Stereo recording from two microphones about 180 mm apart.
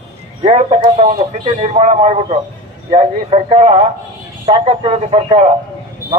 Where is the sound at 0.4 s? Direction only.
30° right (ahead or behind).